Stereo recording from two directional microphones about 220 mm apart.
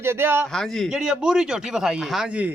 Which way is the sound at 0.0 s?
10° right (ahead or behind).